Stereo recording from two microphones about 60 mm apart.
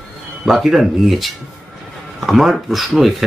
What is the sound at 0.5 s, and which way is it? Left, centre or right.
Speech, centre.